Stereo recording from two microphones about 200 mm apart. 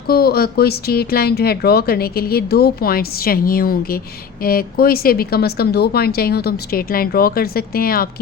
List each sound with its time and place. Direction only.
0.1 s speech: 50° left (ahead or behind)